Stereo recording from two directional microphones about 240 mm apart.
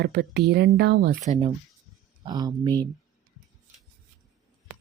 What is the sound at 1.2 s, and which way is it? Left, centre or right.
Speech, right.